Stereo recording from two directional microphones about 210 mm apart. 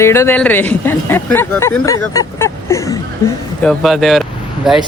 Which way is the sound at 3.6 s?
Centre (ahead or behind).